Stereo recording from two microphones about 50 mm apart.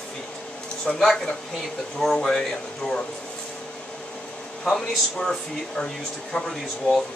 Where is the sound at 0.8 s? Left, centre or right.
Centre.